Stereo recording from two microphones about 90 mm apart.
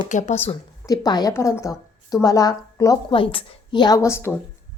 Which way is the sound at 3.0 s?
80° left.